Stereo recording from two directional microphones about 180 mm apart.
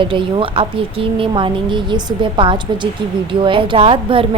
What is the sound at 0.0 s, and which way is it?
A woman's voice, 25° right (ahead or behind).